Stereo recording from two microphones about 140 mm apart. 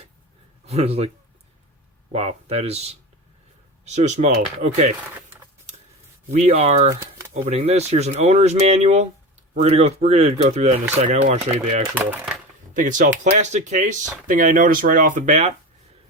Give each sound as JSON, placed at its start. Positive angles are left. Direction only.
{"t": 0.6, "sound": "speech", "side_deg": -50}
{"t": 2.1, "sound": "speech", "side_deg": -50}
{"t": 6.3, "sound": "speech", "side_deg": -50}
{"t": 6.9, "sound": "speech", "side_deg": -20}
{"t": 7.4, "sound": "speech", "side_deg": -50}
{"t": 11.9, "sound": "speech", "side_deg": -5}
{"t": 12.7, "sound": "speech", "side_deg": -65}
{"t": 14.3, "sound": "speech", "side_deg": -70}